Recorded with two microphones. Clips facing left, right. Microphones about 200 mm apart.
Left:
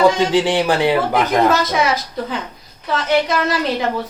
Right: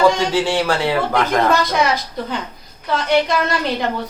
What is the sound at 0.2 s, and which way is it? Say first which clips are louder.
Speech: left 2 dB; 20° left (ahead or behind).